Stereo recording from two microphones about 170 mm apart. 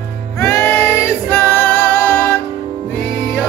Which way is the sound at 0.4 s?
15° left (ahead or behind).